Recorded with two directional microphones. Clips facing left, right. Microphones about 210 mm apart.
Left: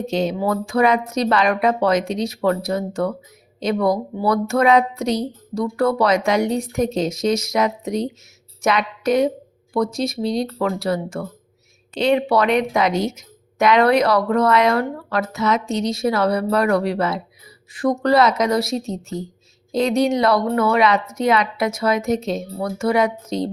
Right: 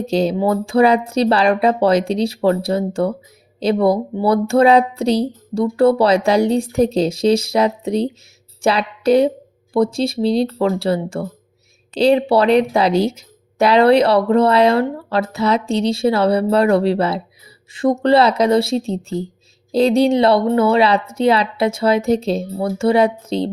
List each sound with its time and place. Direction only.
0.1 s speech: 35° right (ahead or behind)